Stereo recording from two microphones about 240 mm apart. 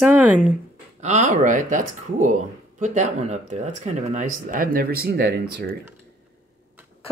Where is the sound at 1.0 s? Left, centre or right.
Right.